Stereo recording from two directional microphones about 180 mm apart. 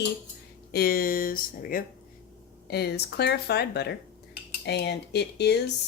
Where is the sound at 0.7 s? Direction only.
55° left (ahead or behind).